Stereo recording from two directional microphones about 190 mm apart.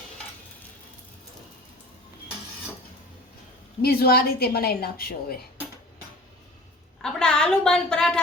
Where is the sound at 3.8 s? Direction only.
55° left (ahead or behind).